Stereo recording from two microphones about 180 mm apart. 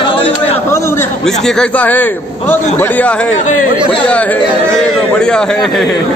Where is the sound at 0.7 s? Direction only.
15° left (ahead or behind).